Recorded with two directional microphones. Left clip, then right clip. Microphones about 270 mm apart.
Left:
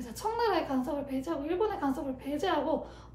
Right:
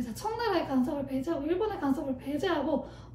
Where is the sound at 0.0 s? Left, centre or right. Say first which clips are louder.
Left 2 dB; left.